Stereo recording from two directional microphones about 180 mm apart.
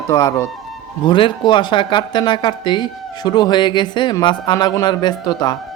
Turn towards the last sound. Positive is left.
turn(degrees=20)  # may be behind; listen again after turning